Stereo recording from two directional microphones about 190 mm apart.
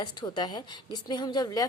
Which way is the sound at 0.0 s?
20° left (ahead or behind).